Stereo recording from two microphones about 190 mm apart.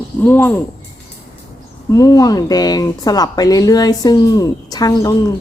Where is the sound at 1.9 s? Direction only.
20° left (ahead or behind).